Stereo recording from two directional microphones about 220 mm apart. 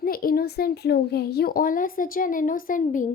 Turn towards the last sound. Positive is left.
turn(degrees=35)  # may be behind; listen again after turning